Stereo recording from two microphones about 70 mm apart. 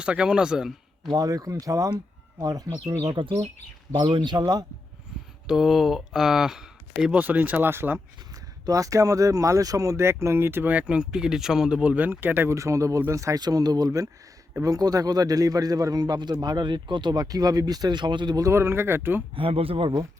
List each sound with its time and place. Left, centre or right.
0.0 s speech: centre
1.1 s speech: right
4.2 s speech: right
5.5 s speech: centre
7.1 s speech: right
8.6 s speech: right
10.7 s speech: centre
11.8 s speech: right
12.5 s speech: right
13.4 s speech: right
18.4 s speech: right